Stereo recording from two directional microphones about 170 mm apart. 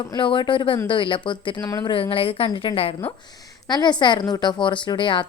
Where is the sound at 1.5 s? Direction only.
10° left (ahead or behind).